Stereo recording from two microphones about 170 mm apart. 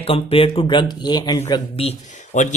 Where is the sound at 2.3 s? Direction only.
50° left (ahead or behind).